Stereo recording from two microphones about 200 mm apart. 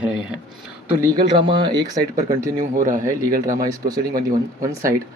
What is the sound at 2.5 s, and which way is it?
Speech, 40° right (ahead or behind).